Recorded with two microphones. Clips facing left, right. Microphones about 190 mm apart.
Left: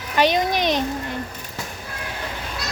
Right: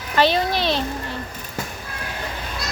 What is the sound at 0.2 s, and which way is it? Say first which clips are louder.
Speech: even; 15° left (ahead or behind).